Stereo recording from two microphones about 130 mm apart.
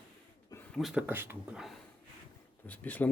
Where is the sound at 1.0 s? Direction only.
15° right (ahead or behind).